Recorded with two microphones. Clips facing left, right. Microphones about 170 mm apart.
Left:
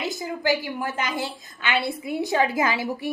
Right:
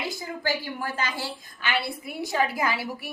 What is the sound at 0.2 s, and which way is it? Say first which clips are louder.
A woman's voice: left 5 dB; 20° left (ahead or behind).